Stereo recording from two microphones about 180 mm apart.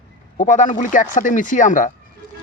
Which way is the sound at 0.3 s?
45° left (ahead or behind).